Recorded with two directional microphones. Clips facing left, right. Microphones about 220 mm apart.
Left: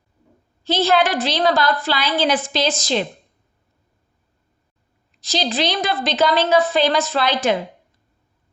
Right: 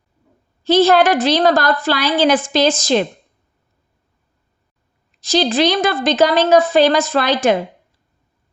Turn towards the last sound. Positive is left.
turn(degrees=-45)  # may be behind; listen again after turning